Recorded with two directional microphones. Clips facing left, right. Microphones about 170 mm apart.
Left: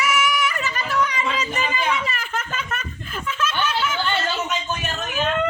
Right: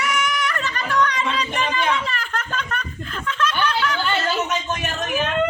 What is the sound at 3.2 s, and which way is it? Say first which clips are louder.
Snicker: right 2 dB; 5° left (ahead or behind).